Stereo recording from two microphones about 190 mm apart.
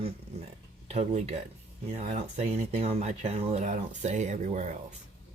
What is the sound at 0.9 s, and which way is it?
Speech, 35° right (ahead or behind).